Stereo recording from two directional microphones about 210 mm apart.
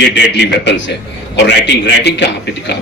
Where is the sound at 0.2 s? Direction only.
55° left (ahead or behind).